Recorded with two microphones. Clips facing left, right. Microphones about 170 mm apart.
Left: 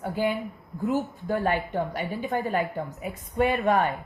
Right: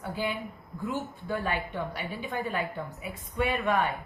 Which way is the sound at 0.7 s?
40° left (ahead or behind).